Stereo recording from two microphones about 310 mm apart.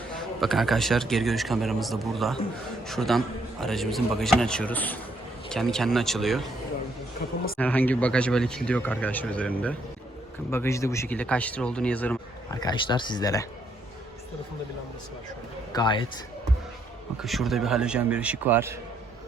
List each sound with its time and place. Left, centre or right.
0.1 s speech: centre
7.2 s speech: left
7.6 s speech: centre
15.7 s speech: centre
17.2 s speech: centre